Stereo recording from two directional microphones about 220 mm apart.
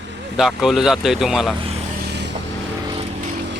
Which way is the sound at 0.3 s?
Centre (ahead or behind).